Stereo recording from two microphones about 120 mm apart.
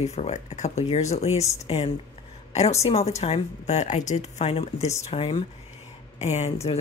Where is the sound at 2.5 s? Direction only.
65° left (ahead or behind).